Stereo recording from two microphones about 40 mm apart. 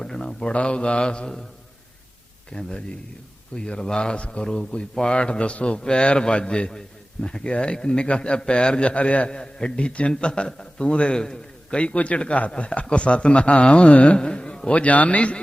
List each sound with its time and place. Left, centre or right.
0.0 s a man's voice: centre
2.5 s a man's voice: left
9.3 s a man's voice: left
11.2 s a man's voice: centre
11.8 s a man's voice: left
14.2 s a sound: left
14.7 s speech: left